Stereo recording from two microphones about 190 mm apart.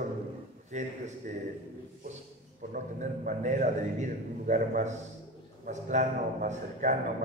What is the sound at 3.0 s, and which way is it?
A man's voice, 40° right (ahead or behind).